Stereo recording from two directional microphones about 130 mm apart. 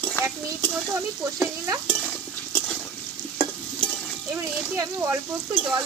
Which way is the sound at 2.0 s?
10° left (ahead or behind).